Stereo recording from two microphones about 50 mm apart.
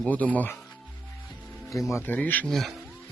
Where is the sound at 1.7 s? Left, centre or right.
Left.